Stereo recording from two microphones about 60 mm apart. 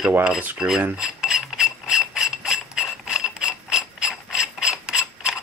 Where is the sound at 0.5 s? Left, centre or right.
Centre.